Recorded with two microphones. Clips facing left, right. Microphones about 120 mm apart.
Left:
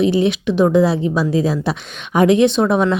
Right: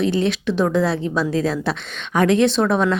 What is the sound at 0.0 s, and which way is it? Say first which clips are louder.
A woman's voice: left 4 dB; 5° left (ahead or behind).